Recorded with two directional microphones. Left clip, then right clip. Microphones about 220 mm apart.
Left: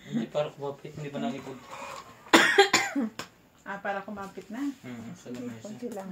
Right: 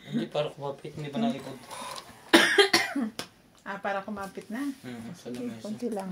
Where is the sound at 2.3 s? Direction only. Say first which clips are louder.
Even; 30° left (ahead or behind).